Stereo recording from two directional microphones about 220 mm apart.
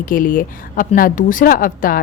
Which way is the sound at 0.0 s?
40° left (ahead or behind).